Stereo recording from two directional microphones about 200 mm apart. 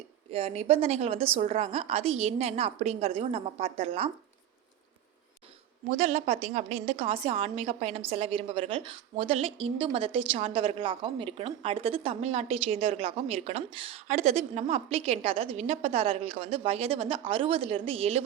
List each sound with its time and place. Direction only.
0.3 s a woman's voice: 30° right (ahead or behind)
5.9 s a woman's voice: 35° right (ahead or behind)